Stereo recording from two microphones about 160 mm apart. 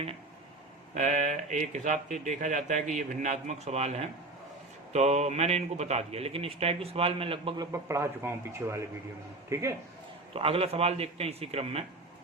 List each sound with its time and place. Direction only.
0.9 s a man's voice: 45° right (ahead or behind); by 9.7 s 20° right (ahead or behind)
10.3 s speech: 35° right (ahead or behind)